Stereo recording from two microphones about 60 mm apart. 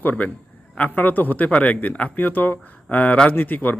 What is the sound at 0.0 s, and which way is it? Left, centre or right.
A man's voice, left.